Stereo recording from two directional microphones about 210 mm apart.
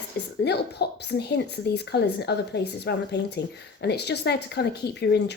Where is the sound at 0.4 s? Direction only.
50° left (ahead or behind).